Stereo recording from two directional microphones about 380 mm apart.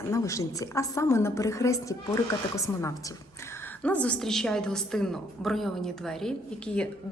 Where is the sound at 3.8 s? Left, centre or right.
Centre.